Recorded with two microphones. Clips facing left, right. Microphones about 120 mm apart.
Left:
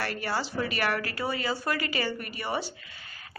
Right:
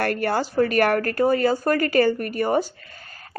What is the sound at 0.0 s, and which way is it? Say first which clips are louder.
A woman's voice: right 9 dB; 50° right (ahead or behind).